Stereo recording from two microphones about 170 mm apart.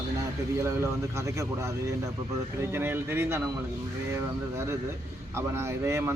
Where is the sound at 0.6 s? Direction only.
15° right (ahead or behind).